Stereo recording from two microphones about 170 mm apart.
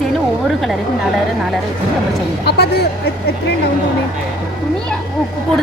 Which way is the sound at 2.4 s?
75° left (ahead or behind).